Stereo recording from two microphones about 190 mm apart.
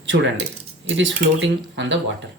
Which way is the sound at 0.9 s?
75° right (ahead or behind).